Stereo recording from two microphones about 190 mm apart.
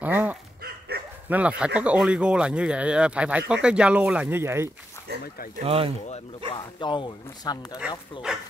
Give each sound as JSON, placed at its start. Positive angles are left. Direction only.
{"t": 0.0, "sound": "dog", "side_deg": -10}
{"t": 0.6, "sound": "dog", "side_deg": -55}
{"t": 1.3, "sound": "speech", "side_deg": -5}
{"t": 5.1, "sound": "a sound", "side_deg": -55}
{"t": 5.6, "sound": "speech", "side_deg": -30}
{"t": 6.5, "sound": "speech", "side_deg": 25}